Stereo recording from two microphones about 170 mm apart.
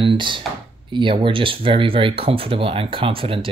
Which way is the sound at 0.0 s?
30° right (ahead or behind).